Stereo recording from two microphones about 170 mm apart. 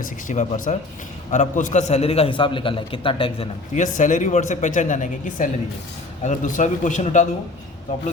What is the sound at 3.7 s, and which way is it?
Speech, 45° left (ahead or behind).